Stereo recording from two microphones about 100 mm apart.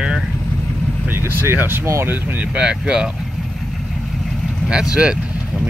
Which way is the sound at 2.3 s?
10° right (ahead or behind).